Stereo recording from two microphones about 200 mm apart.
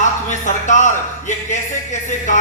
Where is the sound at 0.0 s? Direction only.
40° left (ahead or behind).